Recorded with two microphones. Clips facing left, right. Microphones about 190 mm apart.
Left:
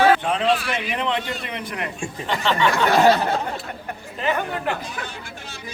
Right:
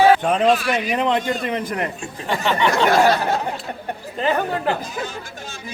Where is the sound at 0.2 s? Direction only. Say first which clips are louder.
Right 4 dB; 45° right (ahead or behind).